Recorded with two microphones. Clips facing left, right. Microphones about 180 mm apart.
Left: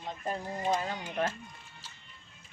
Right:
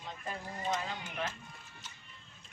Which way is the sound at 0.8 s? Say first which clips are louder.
Left 6 dB; 50° left (ahead or behind).